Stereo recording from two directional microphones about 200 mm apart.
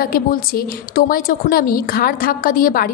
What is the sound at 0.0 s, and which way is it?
A woman's voice, 45° left (ahead or behind).